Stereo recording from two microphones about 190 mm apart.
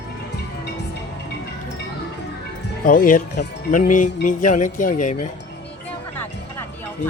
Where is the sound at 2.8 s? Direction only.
45° left (ahead or behind).